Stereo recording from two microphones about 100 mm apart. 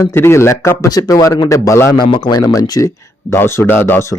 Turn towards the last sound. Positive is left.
turn(degrees=25)  # may be behind; listen again after turning